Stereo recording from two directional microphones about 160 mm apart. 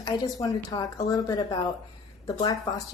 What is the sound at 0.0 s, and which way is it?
A woman's voice, 25° left (ahead or behind).